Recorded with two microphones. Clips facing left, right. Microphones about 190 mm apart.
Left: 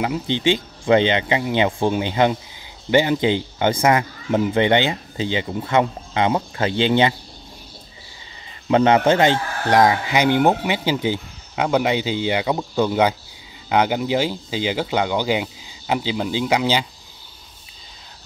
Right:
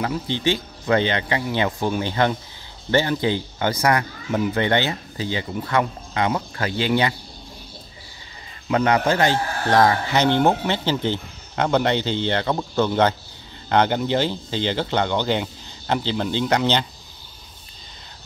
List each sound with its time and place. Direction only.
0.0 s speech: 20° left (ahead or behind)
8.6 s a man's voice: 25° left (ahead or behind); by 16.8 s 10° left (ahead or behind)